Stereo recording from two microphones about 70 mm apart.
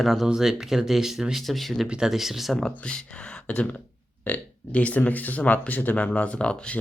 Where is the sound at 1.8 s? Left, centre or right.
Centre.